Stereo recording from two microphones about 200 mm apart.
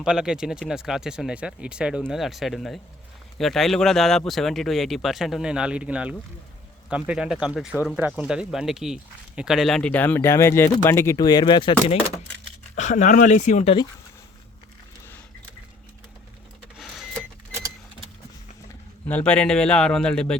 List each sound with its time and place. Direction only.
0.0 s speech: 5° right (ahead or behind); by 11.9 s 25° left (ahead or behind)
12.7 s speech: 35° left (ahead or behind)
16.7 s printer: centre (ahead or behind)
19.0 s speech: 5° left (ahead or behind)